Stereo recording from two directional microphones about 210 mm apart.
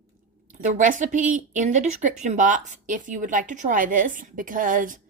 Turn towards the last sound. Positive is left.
turn(degrees=-40)  # may be behind; listen again after turning